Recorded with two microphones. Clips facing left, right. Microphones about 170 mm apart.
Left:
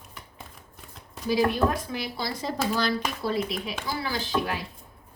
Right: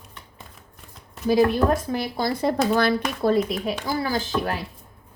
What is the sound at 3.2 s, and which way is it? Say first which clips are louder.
A woman's voice: right 7 dB; 50° right (ahead or behind).